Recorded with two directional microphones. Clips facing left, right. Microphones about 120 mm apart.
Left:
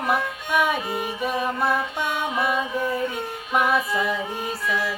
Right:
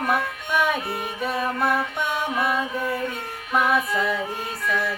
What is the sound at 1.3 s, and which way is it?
Music, 15° left (ahead or behind).